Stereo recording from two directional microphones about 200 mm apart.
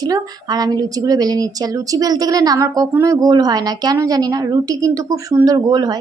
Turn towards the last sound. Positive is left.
turn(degrees=-20)  # may be behind; listen again after turning